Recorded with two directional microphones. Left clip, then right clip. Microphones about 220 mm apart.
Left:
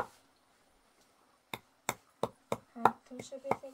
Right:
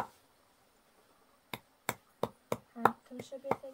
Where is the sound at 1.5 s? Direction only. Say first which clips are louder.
Left 1 dB; 5° right (ahead or behind).